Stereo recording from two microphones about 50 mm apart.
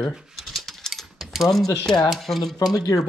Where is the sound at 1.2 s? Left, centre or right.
Centre.